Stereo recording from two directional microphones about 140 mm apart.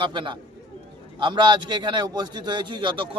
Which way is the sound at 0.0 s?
35° right (ahead or behind).